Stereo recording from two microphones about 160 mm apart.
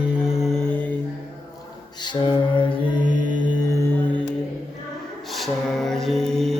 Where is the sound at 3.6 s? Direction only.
20° left (ahead or behind).